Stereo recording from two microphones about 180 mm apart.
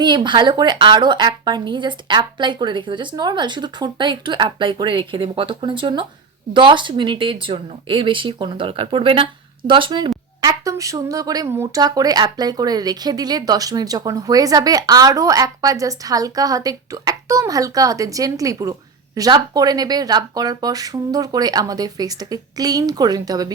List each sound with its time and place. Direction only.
0.0 s speech: 25° right (ahead or behind)